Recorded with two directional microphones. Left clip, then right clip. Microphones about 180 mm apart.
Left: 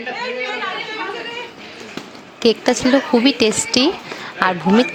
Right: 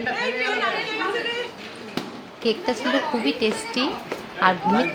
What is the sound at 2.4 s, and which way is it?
A woman's voice, 50° left (ahead or behind).